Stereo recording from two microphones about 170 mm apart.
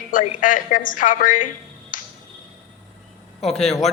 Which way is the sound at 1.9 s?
50° left (ahead or behind).